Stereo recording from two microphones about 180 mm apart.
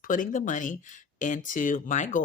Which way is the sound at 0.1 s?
45° left (ahead or behind).